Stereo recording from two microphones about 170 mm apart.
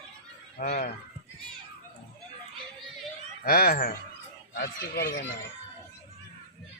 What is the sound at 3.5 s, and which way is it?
Speech, 60° left (ahead or behind).